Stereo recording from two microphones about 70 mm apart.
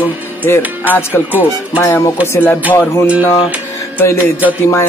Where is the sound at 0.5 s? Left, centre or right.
Left.